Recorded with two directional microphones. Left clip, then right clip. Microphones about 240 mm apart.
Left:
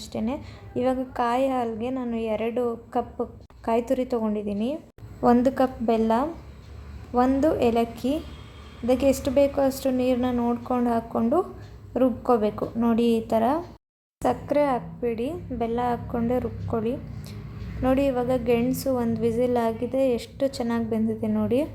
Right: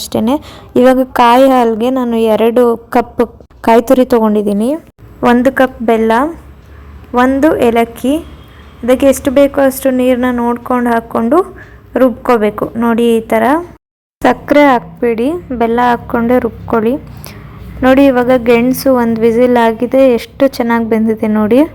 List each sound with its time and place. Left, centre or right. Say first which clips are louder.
0.0 s a woman's voice: right 17 dB; right
8.9 s a woman's voice: right 13 dB; right